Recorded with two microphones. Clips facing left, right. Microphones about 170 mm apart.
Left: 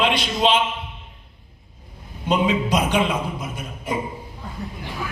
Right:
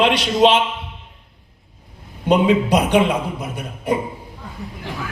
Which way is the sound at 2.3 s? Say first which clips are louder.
Right 5 dB; 60° right (ahead or behind).